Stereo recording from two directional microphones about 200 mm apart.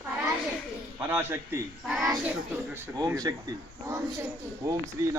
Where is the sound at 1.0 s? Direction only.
10° right (ahead or behind).